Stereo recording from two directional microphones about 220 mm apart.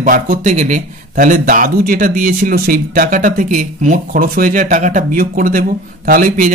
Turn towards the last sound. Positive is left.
turn(degrees=-40)  # may be behind; listen again after turning